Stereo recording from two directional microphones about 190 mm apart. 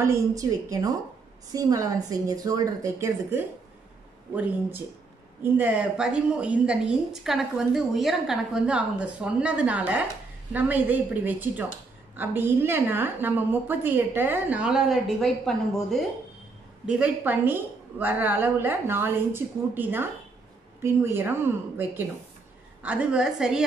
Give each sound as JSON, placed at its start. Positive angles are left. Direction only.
{"t": 0.4, "sound": "a woman's voice", "side_deg": -20}
{"t": 5.4, "sound": "a woman's voice", "side_deg": -10}